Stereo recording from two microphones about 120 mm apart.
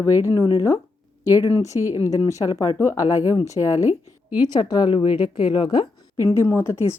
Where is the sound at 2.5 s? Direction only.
25° left (ahead or behind).